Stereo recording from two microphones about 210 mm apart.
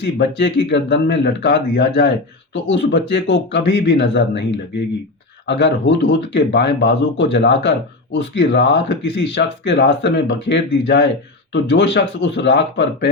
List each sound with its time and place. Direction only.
0.0 s speech: 55° left (ahead or behind)
5.5 s speech: 55° left (ahead or behind)